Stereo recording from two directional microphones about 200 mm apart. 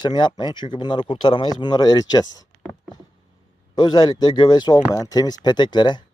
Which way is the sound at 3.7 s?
20° left (ahead or behind).